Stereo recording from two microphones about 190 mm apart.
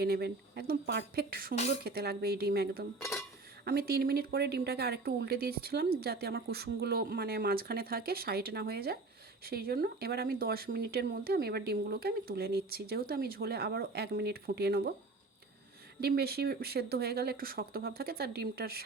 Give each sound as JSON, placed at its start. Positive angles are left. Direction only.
{"t": 0.0, "sound": "speech", "side_deg": -60}
{"t": 3.0, "sound": "a sound", "side_deg": 15}
{"t": 3.6, "sound": "speech", "side_deg": -55}
{"t": 16.1, "sound": "speech", "side_deg": -55}